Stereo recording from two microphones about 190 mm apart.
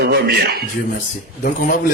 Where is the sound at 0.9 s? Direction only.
45° left (ahead or behind).